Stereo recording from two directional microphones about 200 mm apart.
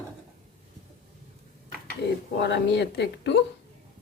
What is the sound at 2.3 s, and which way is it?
A woman's voice, 60° left (ahead or behind).